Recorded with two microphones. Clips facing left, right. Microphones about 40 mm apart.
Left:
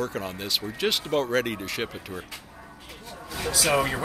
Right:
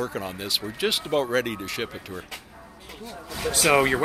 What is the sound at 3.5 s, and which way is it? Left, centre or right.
Speech, right.